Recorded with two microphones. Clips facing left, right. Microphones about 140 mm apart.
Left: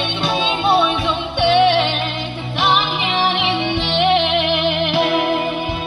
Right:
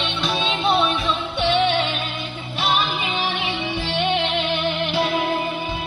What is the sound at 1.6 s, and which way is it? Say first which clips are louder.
Music: left 6 dB; 75° left (ahead or behind).